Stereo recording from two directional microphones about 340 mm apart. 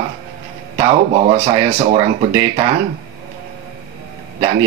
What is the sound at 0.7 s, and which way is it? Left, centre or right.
Speech, centre.